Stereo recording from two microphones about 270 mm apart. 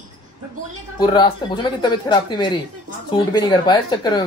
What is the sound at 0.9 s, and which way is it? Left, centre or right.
Speech, centre.